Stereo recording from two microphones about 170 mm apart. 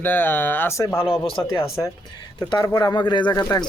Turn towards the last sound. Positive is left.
turn(degrees=20)  # may be behind; listen again after turning